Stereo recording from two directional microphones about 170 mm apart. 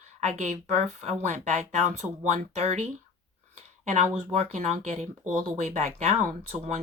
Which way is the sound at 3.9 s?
40° right (ahead or behind).